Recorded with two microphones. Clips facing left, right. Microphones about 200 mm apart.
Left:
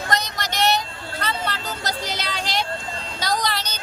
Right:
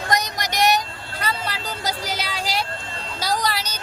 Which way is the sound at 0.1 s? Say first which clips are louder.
Right 3 dB; 15° right (ahead or behind).